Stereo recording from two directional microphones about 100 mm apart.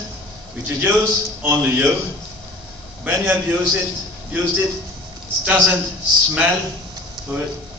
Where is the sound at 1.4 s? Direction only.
20° right (ahead or behind).